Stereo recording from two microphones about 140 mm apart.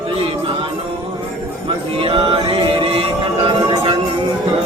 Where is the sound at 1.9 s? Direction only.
40° right (ahead or behind).